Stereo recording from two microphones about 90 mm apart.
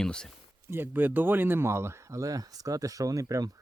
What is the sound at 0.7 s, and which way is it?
Speech, 20° right (ahead or behind).